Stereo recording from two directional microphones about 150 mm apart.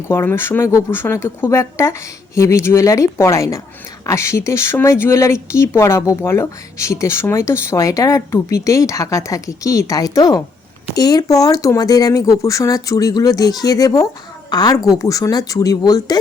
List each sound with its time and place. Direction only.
0.1 s speech: 15° left (ahead or behind)